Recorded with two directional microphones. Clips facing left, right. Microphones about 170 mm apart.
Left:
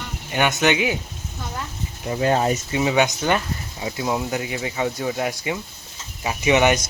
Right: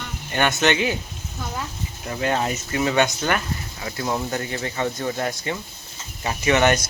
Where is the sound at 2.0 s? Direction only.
30° left (ahead or behind).